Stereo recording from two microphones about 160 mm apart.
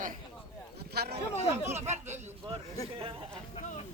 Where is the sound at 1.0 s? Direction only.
90° right.